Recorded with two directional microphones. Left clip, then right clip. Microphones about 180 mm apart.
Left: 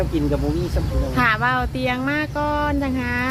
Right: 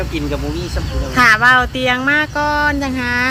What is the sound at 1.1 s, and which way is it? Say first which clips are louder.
Speech: right 9 dB; 35° right (ahead or behind).